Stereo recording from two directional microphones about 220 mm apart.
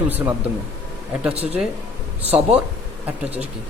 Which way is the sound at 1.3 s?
25° right (ahead or behind).